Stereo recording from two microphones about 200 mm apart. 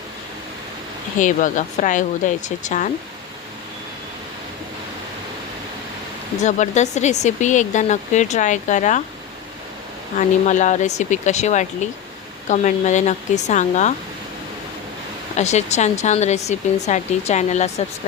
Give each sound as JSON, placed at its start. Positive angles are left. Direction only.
{"t": 1.2, "sound": "speech", "side_deg": 40}
{"t": 6.4, "sound": "speech", "side_deg": 35}
{"t": 10.2, "sound": "speech", "side_deg": 40}
{"t": 15.4, "sound": "speech", "side_deg": 35}